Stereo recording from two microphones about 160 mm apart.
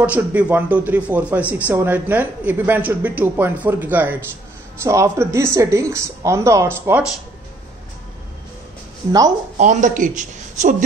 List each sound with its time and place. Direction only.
0.0 s speech: 10° right (ahead or behind)
9.6 s speech: 50° right (ahead or behind)